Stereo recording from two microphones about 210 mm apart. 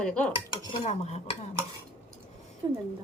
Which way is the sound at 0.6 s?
30° left (ahead or behind).